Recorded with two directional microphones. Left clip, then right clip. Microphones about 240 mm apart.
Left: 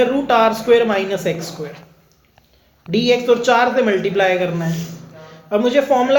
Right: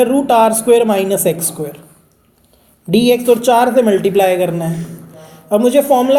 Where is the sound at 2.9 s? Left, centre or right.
Right.